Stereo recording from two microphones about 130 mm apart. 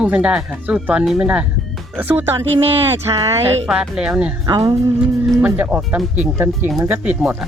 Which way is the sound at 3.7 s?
5° right (ahead or behind).